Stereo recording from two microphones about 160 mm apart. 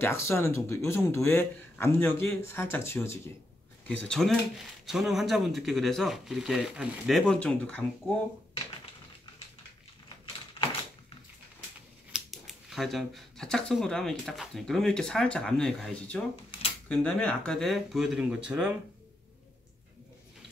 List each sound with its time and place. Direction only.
0.0 s a man's voice: 15° left (ahead or behind)
3.9 s speech: 5° left (ahead or behind)
10.0 s a sound: 30° left (ahead or behind)
12.1 s speech: centre (ahead or behind)